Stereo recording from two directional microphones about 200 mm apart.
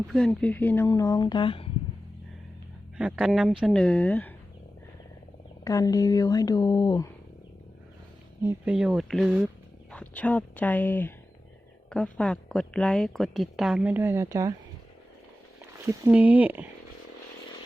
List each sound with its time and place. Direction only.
0.1 s speech: 5° left (ahead or behind); by 1.7 s 25° left (ahead or behind)
3.0 s a woman's voice: 5° right (ahead or behind)
5.6 s speech: 15° left (ahead or behind)
8.4 s a woman's voice: 5° right (ahead or behind)
9.9 s a woman's voice: 5° left (ahead or behind); by 14.5 s 15° right (ahead or behind)
15.9 s speech: 10° right (ahead or behind)